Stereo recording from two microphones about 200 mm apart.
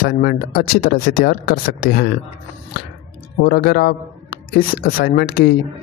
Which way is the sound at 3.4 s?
50° left (ahead or behind).